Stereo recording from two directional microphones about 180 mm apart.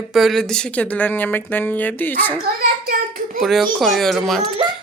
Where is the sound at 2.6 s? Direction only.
60° right (ahead or behind).